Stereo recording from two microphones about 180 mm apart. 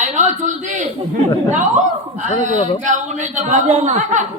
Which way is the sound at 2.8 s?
45° right (ahead or behind).